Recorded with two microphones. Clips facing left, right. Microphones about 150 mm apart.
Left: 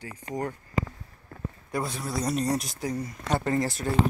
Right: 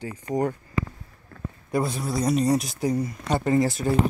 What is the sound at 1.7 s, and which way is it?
Speech, 10° right (ahead or behind).